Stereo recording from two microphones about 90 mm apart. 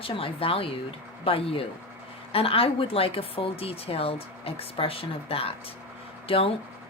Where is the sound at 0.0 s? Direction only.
90° left.